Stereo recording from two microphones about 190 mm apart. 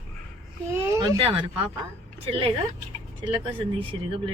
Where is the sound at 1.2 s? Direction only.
30° right (ahead or behind).